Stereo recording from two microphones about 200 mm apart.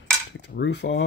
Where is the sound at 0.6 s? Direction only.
60° left (ahead or behind).